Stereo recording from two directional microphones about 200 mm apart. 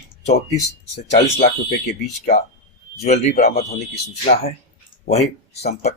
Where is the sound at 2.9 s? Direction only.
35° left (ahead or behind).